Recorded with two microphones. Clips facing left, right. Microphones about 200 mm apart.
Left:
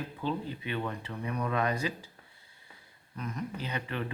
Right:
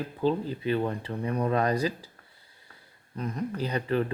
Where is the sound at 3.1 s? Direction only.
35° right (ahead or behind).